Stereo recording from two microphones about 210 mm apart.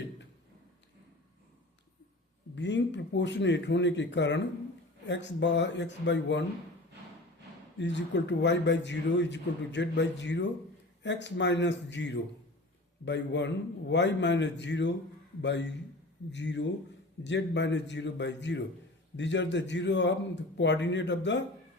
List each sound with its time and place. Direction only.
2.6 s a man's voice: 60° left (ahead or behind)
7.8 s a man's voice: 55° left (ahead or behind)